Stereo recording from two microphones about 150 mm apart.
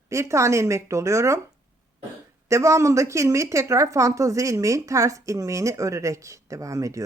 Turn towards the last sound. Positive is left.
turn(degrees=-20)  # may be behind; listen again after turning